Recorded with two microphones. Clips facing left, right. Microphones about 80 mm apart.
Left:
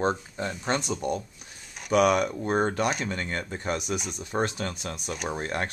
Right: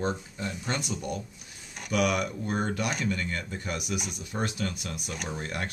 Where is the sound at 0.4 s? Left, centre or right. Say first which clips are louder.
Left 4 dB; left.